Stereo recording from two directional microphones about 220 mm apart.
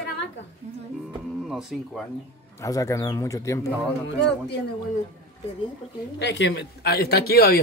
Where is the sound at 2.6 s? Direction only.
15° left (ahead or behind).